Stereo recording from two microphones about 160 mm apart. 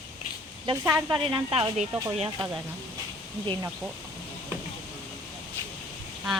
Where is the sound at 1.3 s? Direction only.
35° right (ahead or behind).